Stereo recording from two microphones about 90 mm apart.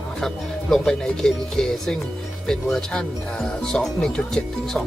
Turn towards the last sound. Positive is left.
turn(degrees=5)  # may be behind; listen again after turning